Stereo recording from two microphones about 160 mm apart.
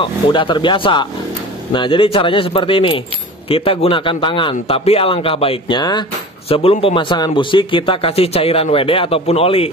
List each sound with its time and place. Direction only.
0.0 s a man's voice: 30° left (ahead or behind)